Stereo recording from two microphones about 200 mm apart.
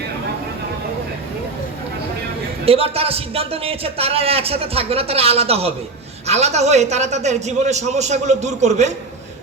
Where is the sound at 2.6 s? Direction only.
30° right (ahead or behind).